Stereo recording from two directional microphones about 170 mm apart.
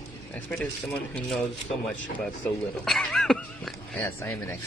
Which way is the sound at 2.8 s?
Centre (ahead or behind).